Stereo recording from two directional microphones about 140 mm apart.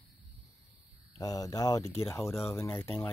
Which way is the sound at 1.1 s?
25° left (ahead or behind).